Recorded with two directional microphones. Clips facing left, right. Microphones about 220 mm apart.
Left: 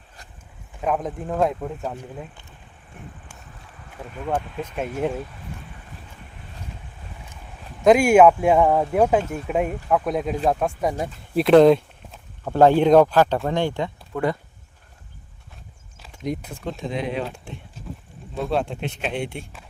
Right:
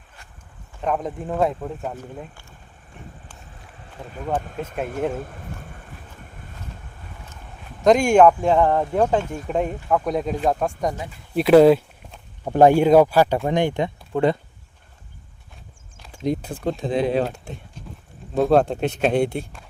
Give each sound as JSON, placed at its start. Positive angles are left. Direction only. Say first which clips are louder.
{"t": 0.8, "sound": "speech", "louder": "even", "side_deg": 0}
{"t": 3.0, "sound": "boat", "louder": "left 1 dB", "side_deg": 0}
{"t": 4.0, "sound": "speech", "louder": "left 1 dB", "side_deg": 5}
{"t": 4.4, "sound": "speech", "louder": "right 1 dB", "side_deg": -45}
{"t": 5.1, "sound": "vehicle", "louder": "right 1 dB", "side_deg": -50}
{"t": 7.9, "sound": "speech", "louder": "left 1 dB", "side_deg": 5}
{"t": 16.1, "sound": "speech", "louder": "right 4 dB", "side_deg": -30}